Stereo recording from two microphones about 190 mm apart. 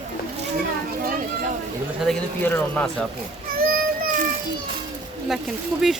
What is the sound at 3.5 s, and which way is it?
Child singing, 50° right (ahead or behind).